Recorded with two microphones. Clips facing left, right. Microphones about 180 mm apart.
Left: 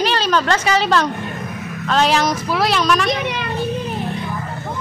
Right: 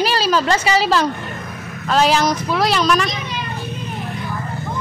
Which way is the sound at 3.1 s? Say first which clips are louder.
Left 6 dB; 65° left (ahead or behind).